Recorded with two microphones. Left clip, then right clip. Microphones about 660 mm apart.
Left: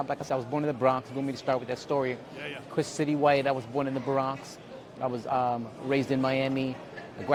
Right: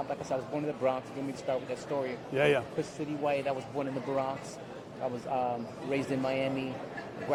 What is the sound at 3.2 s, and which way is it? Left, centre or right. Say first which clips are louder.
Speech: left 6 dB; left.